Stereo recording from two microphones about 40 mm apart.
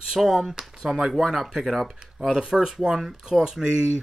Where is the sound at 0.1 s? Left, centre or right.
Centre.